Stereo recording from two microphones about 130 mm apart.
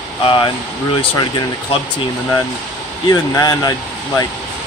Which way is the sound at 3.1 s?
30° left (ahead or behind).